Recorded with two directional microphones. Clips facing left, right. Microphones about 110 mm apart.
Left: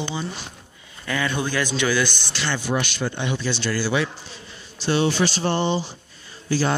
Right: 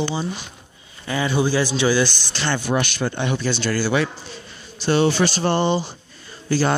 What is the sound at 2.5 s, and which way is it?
Speech, 55° right (ahead or behind).